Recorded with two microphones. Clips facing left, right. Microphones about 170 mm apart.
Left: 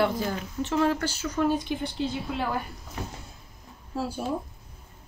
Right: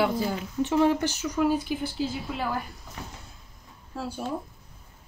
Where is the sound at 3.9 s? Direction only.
5° left (ahead or behind).